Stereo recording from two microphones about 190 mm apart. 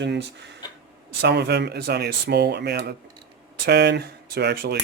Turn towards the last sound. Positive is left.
turn(degrees=-60)  # may be behind; listen again after turning